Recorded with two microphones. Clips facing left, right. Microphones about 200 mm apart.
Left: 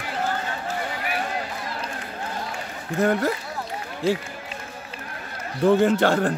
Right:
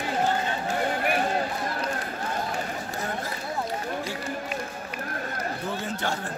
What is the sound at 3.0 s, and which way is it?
Speech, 65° left (ahead or behind).